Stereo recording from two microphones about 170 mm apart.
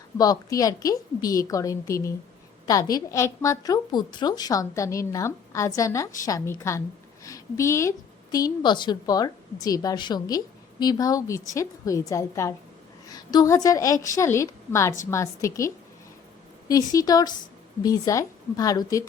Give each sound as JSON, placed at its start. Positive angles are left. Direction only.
{"t": 0.2, "sound": "a woman's voice", "side_deg": 20}